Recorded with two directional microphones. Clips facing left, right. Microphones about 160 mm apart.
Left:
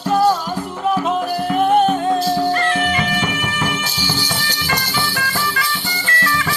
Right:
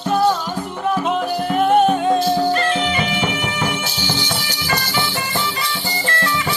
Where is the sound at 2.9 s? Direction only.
20° right (ahead or behind).